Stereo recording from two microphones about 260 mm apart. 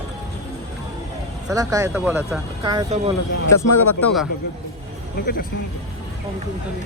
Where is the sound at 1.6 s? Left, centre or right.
Centre.